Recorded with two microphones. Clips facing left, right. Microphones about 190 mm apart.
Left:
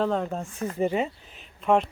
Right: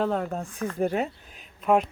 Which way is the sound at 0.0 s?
5° right (ahead or behind).